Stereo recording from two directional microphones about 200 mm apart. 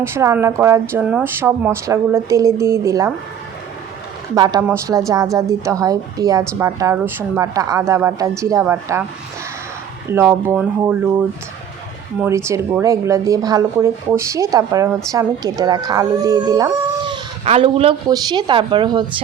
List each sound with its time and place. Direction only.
0.0 s speech: 15° right (ahead or behind)
4.4 s speech: 20° right (ahead or behind)
10.1 s speech: 15° right (ahead or behind)
12.2 s speech: 15° right (ahead or behind)